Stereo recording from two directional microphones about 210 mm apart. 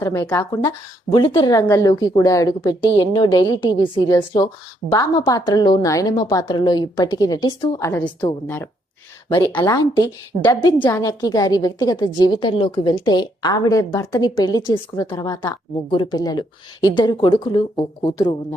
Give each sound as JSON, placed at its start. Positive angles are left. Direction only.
{"t": 0.0, "sound": "a woman's voice", "side_deg": 15}
{"t": 9.6, "sound": "a woman's voice", "side_deg": 20}